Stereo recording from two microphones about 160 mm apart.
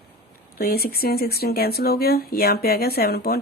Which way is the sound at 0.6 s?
75° left (ahead or behind).